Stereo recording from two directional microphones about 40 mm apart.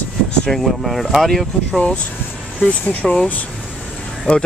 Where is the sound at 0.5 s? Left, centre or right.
Centre.